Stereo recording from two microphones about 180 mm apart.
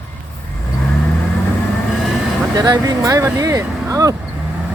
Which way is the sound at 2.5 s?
20° right (ahead or behind).